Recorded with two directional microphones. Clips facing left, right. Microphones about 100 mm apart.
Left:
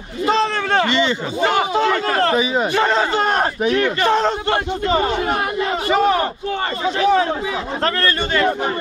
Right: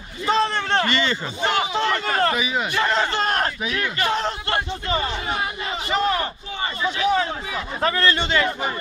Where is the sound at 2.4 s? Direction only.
30° left (ahead or behind).